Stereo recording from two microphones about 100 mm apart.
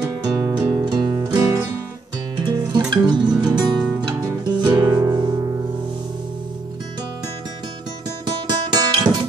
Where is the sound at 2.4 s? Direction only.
45° right (ahead or behind).